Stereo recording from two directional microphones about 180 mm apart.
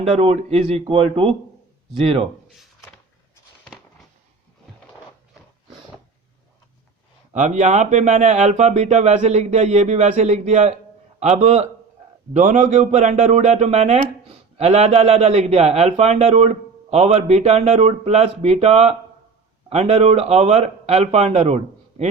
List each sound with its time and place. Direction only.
0.0 s speech: 35° right (ahead or behind)
7.3 s speech: 40° right (ahead or behind)